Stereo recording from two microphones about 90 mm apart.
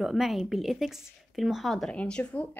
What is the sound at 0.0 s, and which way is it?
A woman's voice, centre (ahead or behind).